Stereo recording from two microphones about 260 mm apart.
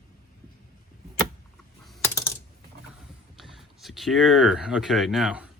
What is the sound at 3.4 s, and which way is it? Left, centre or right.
Speech, centre.